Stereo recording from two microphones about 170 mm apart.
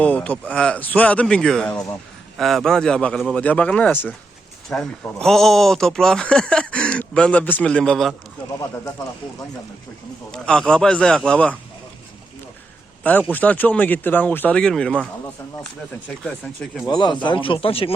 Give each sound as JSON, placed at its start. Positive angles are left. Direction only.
{"t": 0.0, "sound": "speech", "side_deg": 10}
{"t": 10.3, "sound": "speech", "side_deg": 5}
{"t": 13.0, "sound": "speech", "side_deg": 10}
{"t": 16.0, "sound": "speech", "side_deg": 5}
{"t": 16.8, "sound": "speech", "side_deg": 25}